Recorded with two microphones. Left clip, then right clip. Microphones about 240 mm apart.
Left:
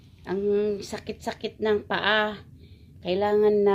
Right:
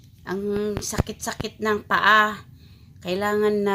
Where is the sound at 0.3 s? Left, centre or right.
Right.